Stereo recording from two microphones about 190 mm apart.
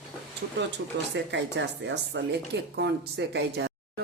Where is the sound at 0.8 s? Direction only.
70° right (ahead or behind).